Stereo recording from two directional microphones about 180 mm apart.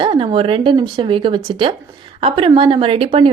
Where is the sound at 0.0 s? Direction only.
30° right (ahead or behind).